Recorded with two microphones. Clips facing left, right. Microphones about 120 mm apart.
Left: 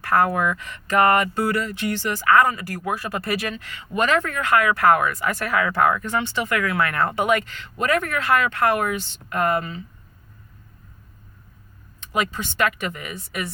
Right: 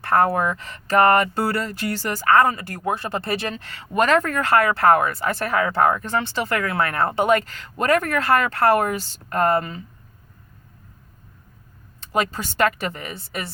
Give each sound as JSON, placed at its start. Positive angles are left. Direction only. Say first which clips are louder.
{"t": 0.0, "sound": "speech", "louder": "right 1 dB", "side_deg": -30}
{"t": 11.9, "sound": "speech", "louder": "right 2 dB", "side_deg": -35}